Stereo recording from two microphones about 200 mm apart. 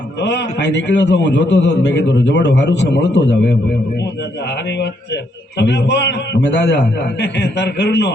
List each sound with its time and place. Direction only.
0.2 s a man's voice: 60° left (ahead or behind)
4.8 s a man's voice: 60° left (ahead or behind)